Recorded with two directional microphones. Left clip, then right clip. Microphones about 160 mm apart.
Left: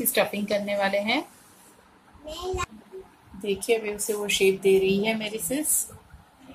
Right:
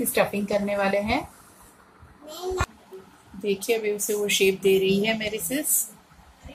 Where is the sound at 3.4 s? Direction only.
Centre (ahead or behind).